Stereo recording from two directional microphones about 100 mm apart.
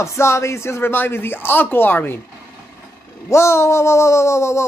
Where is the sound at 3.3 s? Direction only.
25° left (ahead or behind).